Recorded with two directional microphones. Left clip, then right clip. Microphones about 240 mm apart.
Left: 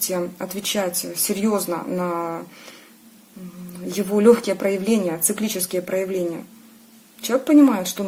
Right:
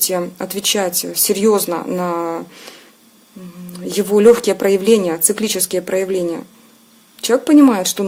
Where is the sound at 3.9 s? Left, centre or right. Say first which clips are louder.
Right 5 dB; right.